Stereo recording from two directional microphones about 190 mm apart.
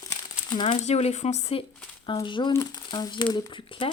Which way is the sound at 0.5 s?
25° left (ahead or behind).